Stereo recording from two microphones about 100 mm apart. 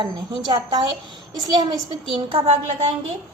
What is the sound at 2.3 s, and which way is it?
Speech, 80° right.